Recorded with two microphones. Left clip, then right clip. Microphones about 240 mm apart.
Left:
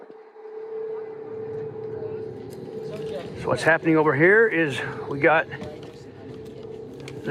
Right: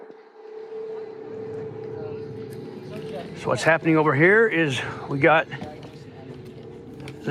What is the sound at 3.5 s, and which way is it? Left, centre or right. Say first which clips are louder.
A man's voice: even; right.